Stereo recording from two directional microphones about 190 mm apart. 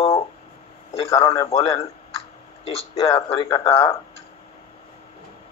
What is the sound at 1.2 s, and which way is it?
Speech, 15° left (ahead or behind).